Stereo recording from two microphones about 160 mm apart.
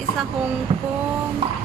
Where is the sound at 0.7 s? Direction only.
45° right (ahead or behind).